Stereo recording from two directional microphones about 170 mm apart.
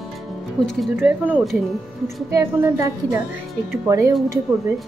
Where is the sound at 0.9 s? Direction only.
10° right (ahead or behind).